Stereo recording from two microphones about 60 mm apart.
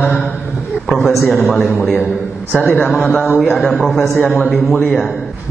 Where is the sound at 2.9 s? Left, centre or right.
Centre.